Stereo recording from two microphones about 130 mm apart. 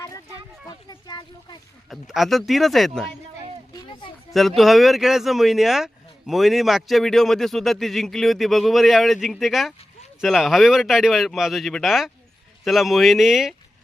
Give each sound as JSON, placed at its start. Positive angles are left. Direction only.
{"t": 0.7, "sound": "a sound", "side_deg": 30}
{"t": 1.9, "sound": "speech", "side_deg": 0}
{"t": 4.3, "sound": "speech", "side_deg": 0}